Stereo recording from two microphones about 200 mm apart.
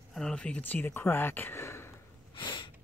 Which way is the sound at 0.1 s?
5° left (ahead or behind).